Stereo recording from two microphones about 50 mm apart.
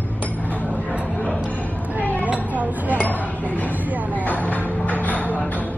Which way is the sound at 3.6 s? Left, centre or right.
Right.